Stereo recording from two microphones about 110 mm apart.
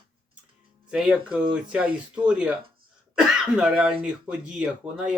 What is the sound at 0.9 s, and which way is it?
Speech, 5° right (ahead or behind).